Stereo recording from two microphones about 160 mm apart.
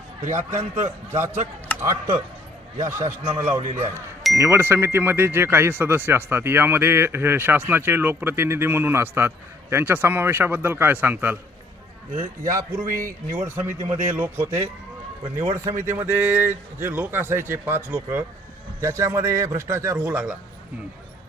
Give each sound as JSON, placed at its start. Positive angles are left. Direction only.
{"t": 0.3, "sound": "a man's voice", "side_deg": -15}
{"t": 12.9, "sound": "speech", "side_deg": -60}
{"t": 13.8, "sound": "a man's voice", "side_deg": -40}
{"t": 15.5, "sound": "speech", "side_deg": -15}